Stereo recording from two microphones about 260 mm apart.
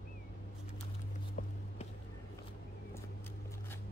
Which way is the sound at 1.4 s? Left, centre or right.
Left.